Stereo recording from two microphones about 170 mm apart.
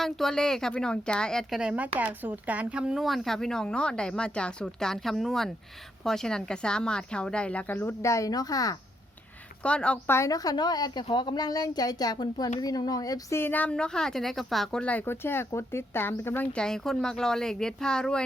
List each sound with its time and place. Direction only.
0.0 s speech: centre (ahead or behind); by 8.8 s 20° left (ahead or behind)
9.6 s a woman's voice: 5° left (ahead or behind)